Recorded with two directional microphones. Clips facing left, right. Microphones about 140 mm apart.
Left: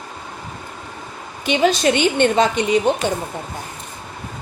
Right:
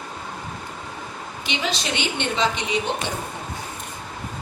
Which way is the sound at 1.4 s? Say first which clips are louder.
Left 12 dB; 50° left (ahead or behind).